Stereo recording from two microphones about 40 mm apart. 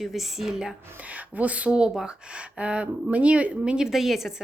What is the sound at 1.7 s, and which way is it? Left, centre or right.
Speech, centre.